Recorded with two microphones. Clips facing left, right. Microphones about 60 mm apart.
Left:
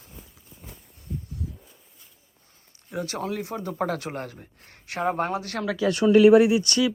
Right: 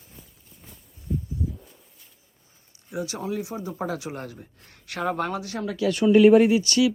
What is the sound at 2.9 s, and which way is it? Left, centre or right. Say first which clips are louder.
Speech: even; left.